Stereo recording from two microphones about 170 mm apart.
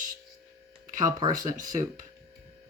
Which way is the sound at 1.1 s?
20° right (ahead or behind).